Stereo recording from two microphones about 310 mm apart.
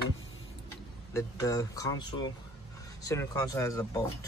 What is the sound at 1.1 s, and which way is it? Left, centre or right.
Speech, centre.